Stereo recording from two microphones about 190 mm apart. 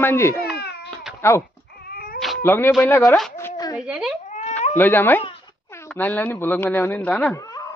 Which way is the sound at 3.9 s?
5° right (ahead or behind).